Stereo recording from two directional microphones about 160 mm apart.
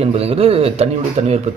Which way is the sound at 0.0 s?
40° right (ahead or behind).